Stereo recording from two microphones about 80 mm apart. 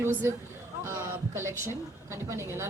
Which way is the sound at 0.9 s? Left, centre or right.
Right.